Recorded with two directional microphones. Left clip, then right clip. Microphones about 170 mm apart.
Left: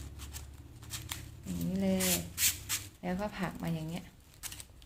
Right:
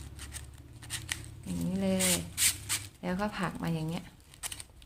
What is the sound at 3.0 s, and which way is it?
Speech, 20° right (ahead or behind).